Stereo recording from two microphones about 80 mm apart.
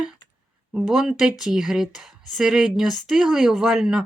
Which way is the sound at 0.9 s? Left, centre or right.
Centre.